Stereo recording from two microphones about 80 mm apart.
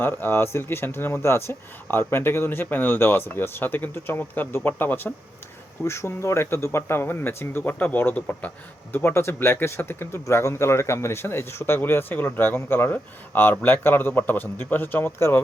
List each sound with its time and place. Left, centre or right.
0.0 s speech: left